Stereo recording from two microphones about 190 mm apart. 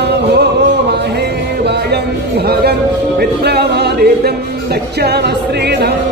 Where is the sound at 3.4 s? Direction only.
60° right (ahead or behind).